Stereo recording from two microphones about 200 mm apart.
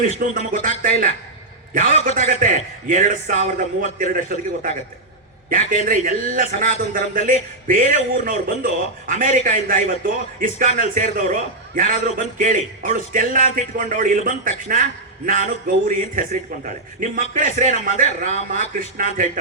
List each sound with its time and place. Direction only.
0.2 s a man's voice: 45° right (ahead or behind)
5.7 s a man's voice: 40° right (ahead or behind)